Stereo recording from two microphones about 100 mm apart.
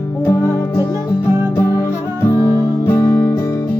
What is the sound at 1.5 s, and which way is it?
Music, 25° left (ahead or behind).